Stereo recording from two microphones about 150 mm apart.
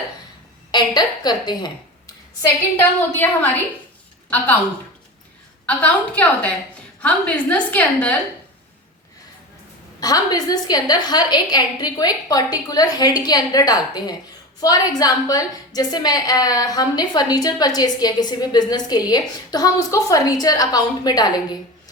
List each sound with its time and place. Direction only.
0.7 s a woman's voice: 30° left (ahead or behind)
4.3 s a woman's voice: 10° left (ahead or behind)
5.6 s a woman's voice: 10° left (ahead or behind)
10.0 s a woman's voice: 25° left (ahead or behind)